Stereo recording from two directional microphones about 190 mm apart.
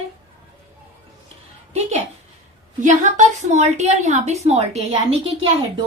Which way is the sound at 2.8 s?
40° right (ahead or behind).